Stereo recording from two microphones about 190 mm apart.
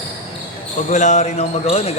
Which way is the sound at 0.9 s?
40° left (ahead or behind).